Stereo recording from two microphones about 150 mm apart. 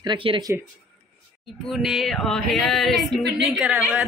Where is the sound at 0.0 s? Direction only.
35° right (ahead or behind).